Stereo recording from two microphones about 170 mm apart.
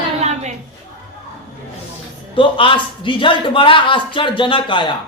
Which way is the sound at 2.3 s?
30° left (ahead or behind).